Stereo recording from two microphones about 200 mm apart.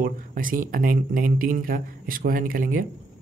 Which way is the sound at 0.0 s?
45° right (ahead or behind).